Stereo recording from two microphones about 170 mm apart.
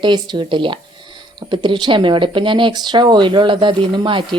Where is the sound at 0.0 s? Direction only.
25° right (ahead or behind).